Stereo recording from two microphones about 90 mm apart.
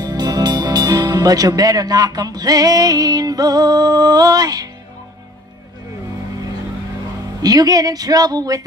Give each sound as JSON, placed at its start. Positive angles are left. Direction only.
{"t": 0.0, "sound": "speech", "side_deg": -50}
{"t": 7.4, "sound": "speech", "side_deg": -45}